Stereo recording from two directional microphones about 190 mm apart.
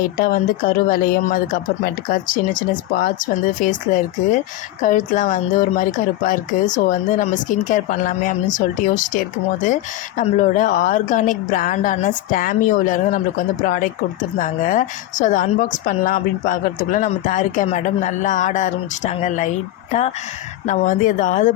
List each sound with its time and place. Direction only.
0.2 s speech: 50° left (ahead or behind)